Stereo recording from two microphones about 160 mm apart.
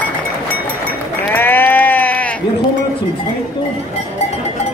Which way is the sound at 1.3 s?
10° left (ahead or behind).